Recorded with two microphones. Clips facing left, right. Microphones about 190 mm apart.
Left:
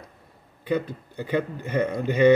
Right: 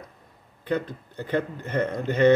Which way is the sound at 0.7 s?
10° left (ahead or behind).